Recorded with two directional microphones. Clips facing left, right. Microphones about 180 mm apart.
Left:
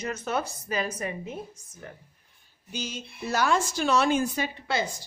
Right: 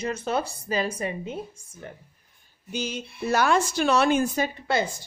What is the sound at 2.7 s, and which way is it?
A woman's voice, 60° right (ahead or behind).